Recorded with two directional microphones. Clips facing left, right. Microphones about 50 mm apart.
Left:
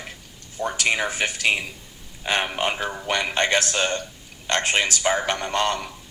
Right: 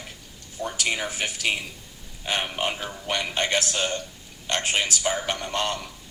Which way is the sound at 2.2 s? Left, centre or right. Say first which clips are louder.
Left 3 dB; left.